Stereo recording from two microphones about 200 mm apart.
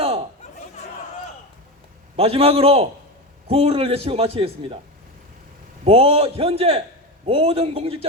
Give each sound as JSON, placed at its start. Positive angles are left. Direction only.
{"t": 0.0, "sound": "chatter", "side_deg": -30}
{"t": 2.1, "sound": "a man's voice", "side_deg": -30}
{"t": 5.8, "sound": "a man's voice", "side_deg": -30}